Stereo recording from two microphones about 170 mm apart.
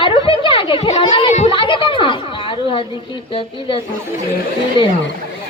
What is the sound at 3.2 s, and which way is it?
Speech, 30° left (ahead or behind).